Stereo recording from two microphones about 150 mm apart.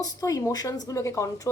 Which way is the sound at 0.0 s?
25° left (ahead or behind).